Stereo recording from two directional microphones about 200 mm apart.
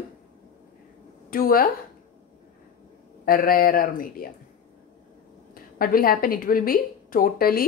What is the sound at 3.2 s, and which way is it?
A woman's voice, 45° left (ahead or behind).